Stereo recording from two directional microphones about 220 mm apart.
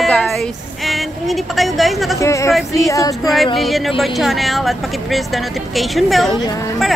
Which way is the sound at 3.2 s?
Centre (ahead or behind).